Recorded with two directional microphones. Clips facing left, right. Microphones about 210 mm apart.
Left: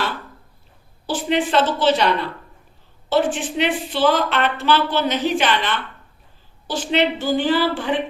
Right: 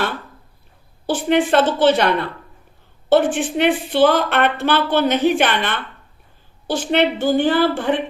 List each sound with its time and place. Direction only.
1.0 s a woman's voice: 55° right (ahead or behind)